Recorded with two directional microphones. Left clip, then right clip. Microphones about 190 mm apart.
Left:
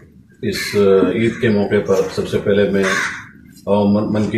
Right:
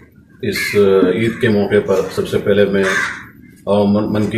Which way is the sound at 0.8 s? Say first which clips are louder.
Right 1 dB; 15° right (ahead or behind).